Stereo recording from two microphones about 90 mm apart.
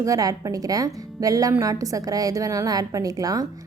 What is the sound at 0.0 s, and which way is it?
A woman's voice, 40° right (ahead or behind).